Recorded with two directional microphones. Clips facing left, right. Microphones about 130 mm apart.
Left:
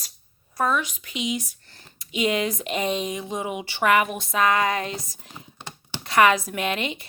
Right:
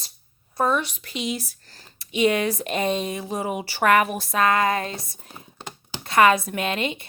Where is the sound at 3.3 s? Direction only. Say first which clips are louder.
Right 2 dB; 35° right (ahead or behind).